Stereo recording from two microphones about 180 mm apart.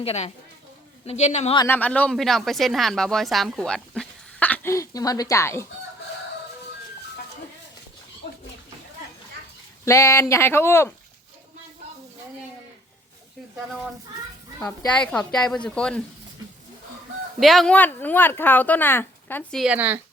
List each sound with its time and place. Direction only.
0.0 s a woman's voice: 35° left (ahead or behind)
1.6 s speech: 10° left (ahead or behind)
9.8 s speech: 15° left (ahead or behind)
15.0 s speech: 5° left (ahead or behind)
17.4 s speech: centre (ahead or behind)